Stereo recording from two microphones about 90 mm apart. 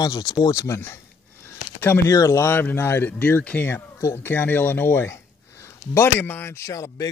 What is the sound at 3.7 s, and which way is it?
Speech, 40° left (ahead or behind).